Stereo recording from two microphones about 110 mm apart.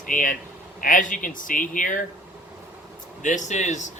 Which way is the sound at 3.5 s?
90° left.